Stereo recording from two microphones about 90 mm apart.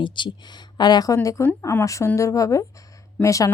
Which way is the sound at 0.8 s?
50° left (ahead or behind).